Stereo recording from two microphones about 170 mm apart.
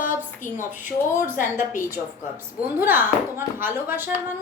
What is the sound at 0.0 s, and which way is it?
A woman's voice, 50° left (ahead or behind).